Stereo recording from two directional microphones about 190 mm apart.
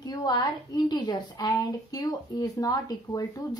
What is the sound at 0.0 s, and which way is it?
A woman's voice, 20° left (ahead or behind).